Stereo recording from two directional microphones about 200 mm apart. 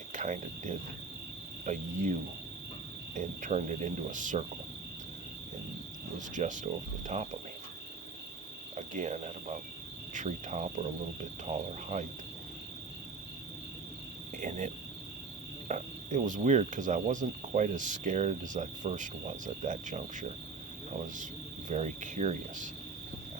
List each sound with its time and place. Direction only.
0.1 s cricket: 40° right (ahead or behind)
3.2 s cricket: 40° right (ahead or behind)
6.1 s cricket: 40° right (ahead or behind)
7.1 s speech: 35° right (ahead or behind)
8.7 s cricket: 35° right (ahead or behind)
14.4 s cricket: 35° right (ahead or behind)
15.7 s cricket: 40° right (ahead or behind)
21.7 s cricket: 40° right (ahead or behind)